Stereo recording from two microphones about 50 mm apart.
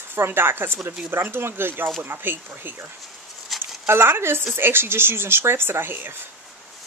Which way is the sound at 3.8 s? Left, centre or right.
Right.